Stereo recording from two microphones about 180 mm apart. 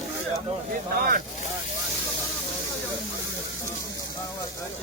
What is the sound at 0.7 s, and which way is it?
Speech, 50° right (ahead or behind).